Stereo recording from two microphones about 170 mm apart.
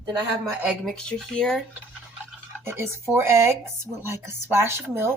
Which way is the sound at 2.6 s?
15° right (ahead or behind).